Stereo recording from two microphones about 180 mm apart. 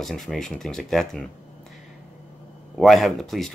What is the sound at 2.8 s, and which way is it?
Speech, centre (ahead or behind).